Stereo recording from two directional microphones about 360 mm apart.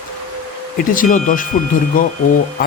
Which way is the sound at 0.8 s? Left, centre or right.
Left.